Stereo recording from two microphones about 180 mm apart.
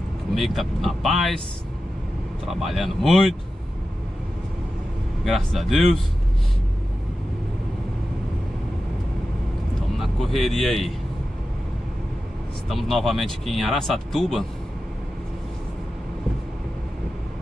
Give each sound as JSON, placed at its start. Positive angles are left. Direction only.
{"t": 0.3, "sound": "speech", "side_deg": 0}
{"t": 2.4, "sound": "speech", "side_deg": 0}
{"t": 5.2, "sound": "speech", "side_deg": 0}
{"t": 9.9, "sound": "speech", "side_deg": 0}
{"t": 12.6, "sound": "speech", "side_deg": 0}